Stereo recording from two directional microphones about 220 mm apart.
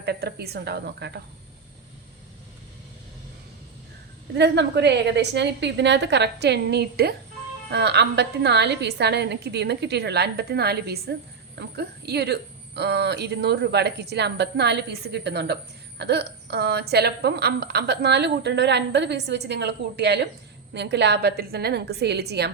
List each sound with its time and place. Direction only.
0.0 s a woman's voice: 50° right (ahead or behind)
4.4 s a woman's voice: 50° right (ahead or behind)